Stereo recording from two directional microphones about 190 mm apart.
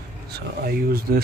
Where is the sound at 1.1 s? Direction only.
50° right (ahead or behind).